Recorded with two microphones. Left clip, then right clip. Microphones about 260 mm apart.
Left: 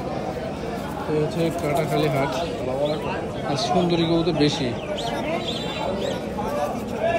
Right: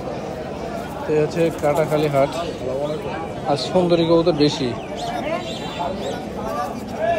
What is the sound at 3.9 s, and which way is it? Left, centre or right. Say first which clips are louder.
Speech: right 6 dB; centre.